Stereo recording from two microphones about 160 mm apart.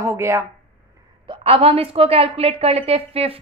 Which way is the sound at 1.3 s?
35° right (ahead or behind).